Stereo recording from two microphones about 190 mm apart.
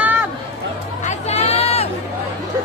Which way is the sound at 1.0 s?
35° left (ahead or behind).